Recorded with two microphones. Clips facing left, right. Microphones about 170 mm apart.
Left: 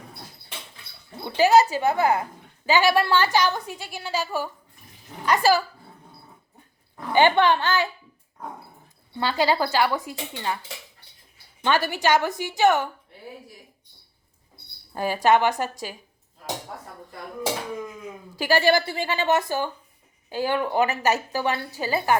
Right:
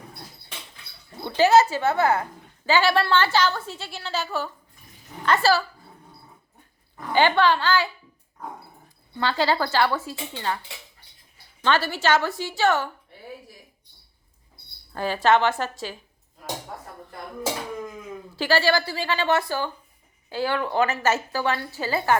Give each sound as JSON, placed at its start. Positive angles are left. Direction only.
{"t": 1.2, "sound": "a woman's voice", "side_deg": 15}
{"t": 6.9, "sound": "speech", "side_deg": 15}
{"t": 9.1, "sound": "a woman's voice", "side_deg": 15}
{"t": 11.6, "sound": "a woman's voice", "side_deg": 15}
{"t": 14.9, "sound": "a woman's voice", "side_deg": 15}
{"t": 18.3, "sound": "a woman's voice", "side_deg": 15}